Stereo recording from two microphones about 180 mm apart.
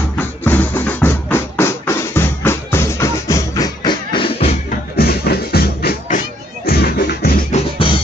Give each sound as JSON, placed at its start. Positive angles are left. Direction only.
{"t": 0.2, "sound": "music", "side_deg": 10}
{"t": 4.6, "sound": "music", "side_deg": 60}